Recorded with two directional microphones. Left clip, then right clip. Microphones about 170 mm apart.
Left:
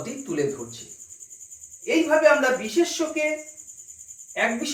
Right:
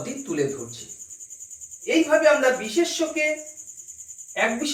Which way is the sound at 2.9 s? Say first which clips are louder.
Right 1 dB; 15° right (ahead or behind).